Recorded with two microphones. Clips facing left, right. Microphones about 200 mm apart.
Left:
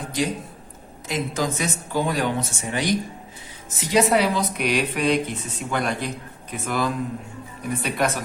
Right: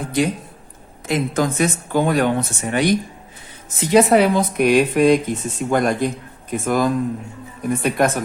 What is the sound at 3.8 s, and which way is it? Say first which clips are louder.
A woman's voice: right 6 dB; 55° right (ahead or behind).